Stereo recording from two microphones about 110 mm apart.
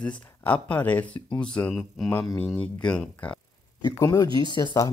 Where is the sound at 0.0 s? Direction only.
15° left (ahead or behind).